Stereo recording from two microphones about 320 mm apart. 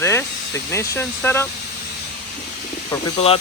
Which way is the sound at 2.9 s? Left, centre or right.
Centre.